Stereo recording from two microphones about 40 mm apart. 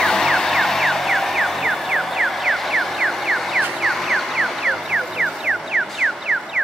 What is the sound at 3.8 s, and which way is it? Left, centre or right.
Music, centre.